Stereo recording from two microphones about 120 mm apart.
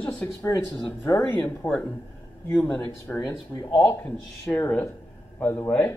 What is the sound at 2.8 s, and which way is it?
Speech, 20° left (ahead or behind).